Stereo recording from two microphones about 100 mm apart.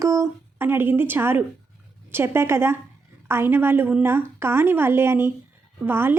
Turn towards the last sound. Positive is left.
turn(degrees=-25)  # may be behind; listen again after turning